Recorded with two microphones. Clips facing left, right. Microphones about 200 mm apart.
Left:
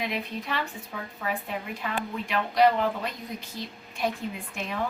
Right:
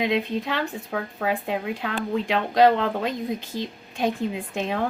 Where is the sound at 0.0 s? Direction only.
90° right.